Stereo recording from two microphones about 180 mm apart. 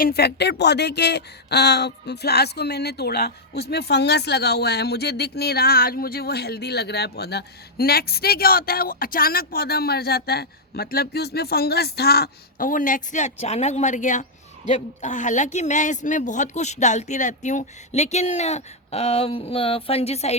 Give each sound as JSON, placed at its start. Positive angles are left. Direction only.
{"t": 0.0, "sound": "speech", "side_deg": 60}